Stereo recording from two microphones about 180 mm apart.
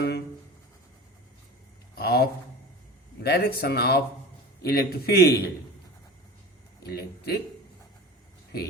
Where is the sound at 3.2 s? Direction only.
60° left (ahead or behind).